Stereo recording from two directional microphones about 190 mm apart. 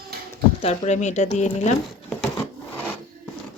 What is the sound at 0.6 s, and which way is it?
Speech, 35° left (ahead or behind).